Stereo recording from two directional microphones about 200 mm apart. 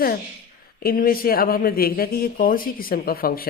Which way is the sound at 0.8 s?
45° left (ahead or behind).